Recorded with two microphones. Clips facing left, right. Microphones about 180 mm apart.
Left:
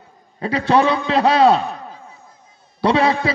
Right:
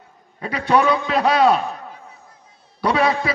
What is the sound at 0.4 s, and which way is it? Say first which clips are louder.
A man's voice: left 2 dB; 30° left (ahead or behind).